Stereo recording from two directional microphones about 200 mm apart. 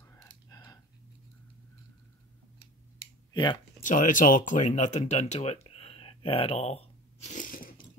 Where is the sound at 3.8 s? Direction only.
40° left (ahead or behind).